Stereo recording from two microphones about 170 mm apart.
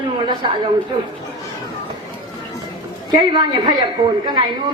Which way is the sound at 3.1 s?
25° right (ahead or behind).